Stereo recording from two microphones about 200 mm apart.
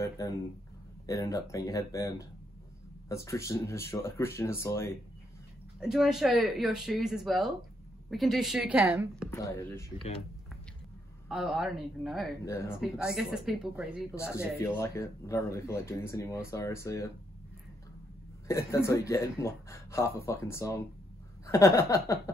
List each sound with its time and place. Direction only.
0.0 s speech: 15° left (ahead or behind)
5.8 s speech: 5° right (ahead or behind)
9.3 s speech: 10° left (ahead or behind)
11.2 s speech: centre (ahead or behind)
12.4 s speech: 15° left (ahead or behind)
12.8 s speech: 5° right (ahead or behind)
14.1 s speech: 15° left (ahead or behind)
18.5 s speech: 15° left (ahead or behind)